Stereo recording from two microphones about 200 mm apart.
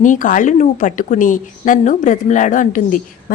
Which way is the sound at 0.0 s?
40° left (ahead or behind).